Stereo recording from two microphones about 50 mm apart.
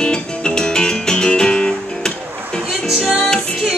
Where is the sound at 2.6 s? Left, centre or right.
Centre.